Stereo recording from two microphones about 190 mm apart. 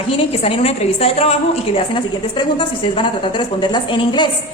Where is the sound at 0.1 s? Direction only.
30° left (ahead or behind).